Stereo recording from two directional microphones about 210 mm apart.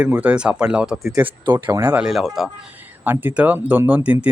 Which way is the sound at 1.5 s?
20° right (ahead or behind).